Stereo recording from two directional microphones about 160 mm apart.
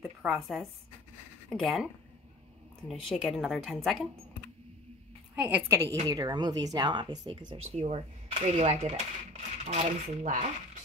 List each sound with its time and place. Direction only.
0.0 s speech: 5° right (ahead or behind)
2.9 s speech: centre (ahead or behind)
5.3 s a woman's voice: 10° right (ahead or behind)
6.0 s speech: 25° right (ahead or behind)
7.7 s speech: 40° right (ahead or behind)